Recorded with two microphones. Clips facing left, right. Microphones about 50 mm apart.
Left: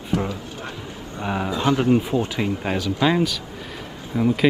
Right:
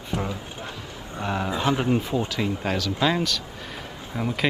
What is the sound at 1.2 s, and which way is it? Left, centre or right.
Speech, centre.